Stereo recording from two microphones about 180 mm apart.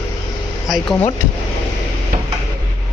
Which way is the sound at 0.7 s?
5° left (ahead or behind).